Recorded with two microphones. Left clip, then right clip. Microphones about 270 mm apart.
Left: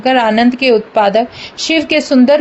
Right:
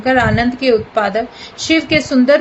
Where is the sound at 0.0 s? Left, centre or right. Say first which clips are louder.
Left 3 dB; left.